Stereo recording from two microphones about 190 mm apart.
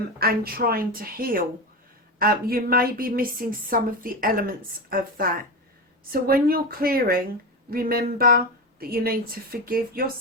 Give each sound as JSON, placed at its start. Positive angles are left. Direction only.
{"t": 0.2, "sound": "a woman's voice", "side_deg": -55}